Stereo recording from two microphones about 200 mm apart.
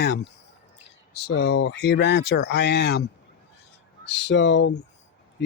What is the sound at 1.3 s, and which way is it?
Speech, 60° left (ahead or behind).